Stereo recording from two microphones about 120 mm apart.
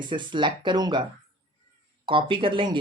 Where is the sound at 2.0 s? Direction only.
45° right (ahead or behind).